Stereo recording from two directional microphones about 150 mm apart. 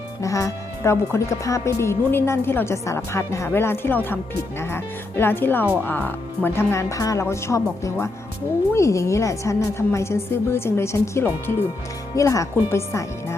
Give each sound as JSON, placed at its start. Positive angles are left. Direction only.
{"t": 0.2, "sound": "a woman's voice", "side_deg": 20}